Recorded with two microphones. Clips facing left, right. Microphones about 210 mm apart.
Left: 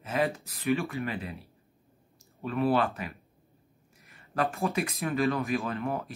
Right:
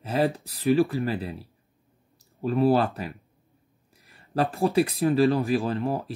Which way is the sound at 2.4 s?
35° right (ahead or behind).